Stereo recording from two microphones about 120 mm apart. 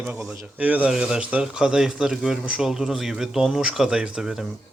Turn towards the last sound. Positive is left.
turn(degrees=-5)  # may be behind; listen again after turning